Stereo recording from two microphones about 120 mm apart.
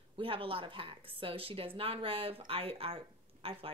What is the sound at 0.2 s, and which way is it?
Speech, 50° right (ahead or behind).